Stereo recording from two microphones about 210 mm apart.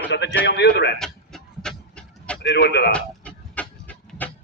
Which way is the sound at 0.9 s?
Centre (ahead or behind).